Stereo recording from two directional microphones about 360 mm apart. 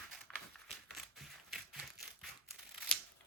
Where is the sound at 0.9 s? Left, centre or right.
Centre.